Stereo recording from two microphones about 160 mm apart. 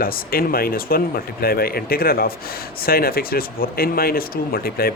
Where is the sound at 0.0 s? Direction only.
65° left (ahead or behind).